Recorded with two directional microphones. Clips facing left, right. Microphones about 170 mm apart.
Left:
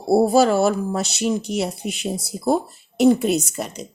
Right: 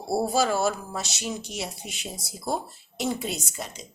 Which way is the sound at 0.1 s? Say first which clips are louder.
Left 9 dB; 60° left (ahead or behind).